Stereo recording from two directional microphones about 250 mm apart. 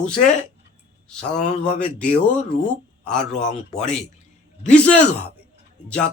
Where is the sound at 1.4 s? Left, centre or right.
Left.